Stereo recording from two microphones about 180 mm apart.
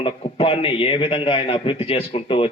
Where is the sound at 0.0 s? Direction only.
30° left (ahead or behind).